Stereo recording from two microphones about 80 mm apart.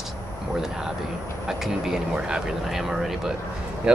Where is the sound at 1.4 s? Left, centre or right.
Centre.